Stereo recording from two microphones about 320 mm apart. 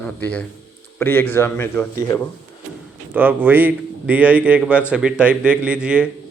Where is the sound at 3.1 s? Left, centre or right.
Centre.